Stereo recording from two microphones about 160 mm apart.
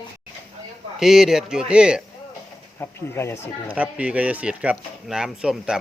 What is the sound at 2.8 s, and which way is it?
Speech, 15° left (ahead or behind).